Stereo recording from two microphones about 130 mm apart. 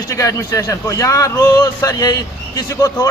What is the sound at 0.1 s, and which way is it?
A man's voice, 25° left (ahead or behind).